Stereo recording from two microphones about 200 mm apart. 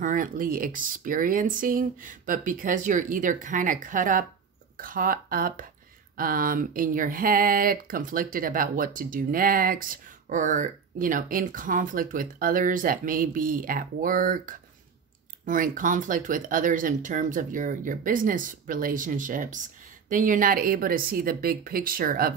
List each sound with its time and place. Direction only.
0.0 s speech: 40° right (ahead or behind)